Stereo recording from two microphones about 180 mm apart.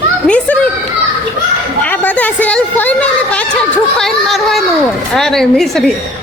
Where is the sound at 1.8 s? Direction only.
10° left (ahead or behind).